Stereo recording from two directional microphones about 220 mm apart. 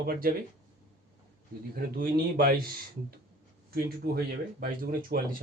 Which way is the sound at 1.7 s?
40° right (ahead or behind).